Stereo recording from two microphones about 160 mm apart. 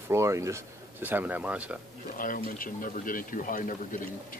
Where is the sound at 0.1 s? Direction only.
20° right (ahead or behind).